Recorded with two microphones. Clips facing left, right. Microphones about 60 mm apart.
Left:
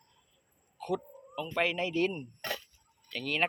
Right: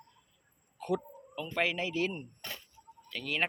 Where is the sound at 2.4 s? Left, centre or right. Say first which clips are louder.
Left 7 dB; left.